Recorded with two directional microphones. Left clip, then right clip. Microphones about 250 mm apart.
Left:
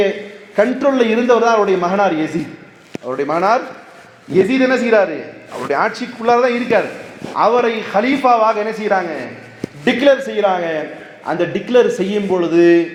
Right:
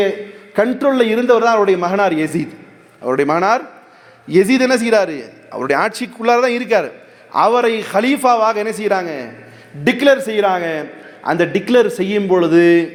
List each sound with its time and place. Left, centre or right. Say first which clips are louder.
0.5 s a man's voice: even; right